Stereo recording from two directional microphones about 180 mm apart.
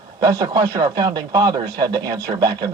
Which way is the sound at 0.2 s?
20° right (ahead or behind).